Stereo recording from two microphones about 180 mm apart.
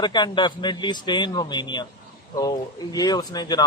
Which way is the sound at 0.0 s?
25° left (ahead or behind).